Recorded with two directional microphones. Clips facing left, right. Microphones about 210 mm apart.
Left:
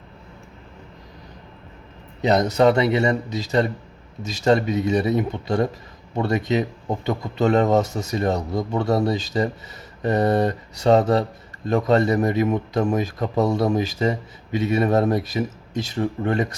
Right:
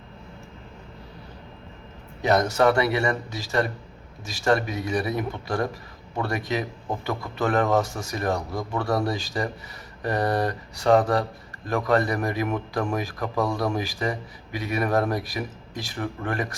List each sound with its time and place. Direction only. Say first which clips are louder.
2.2 s speech: left 3 dB; 20° left (ahead or behind)